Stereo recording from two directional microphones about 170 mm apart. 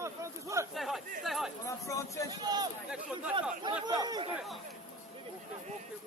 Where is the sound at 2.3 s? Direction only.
25° right (ahead or behind).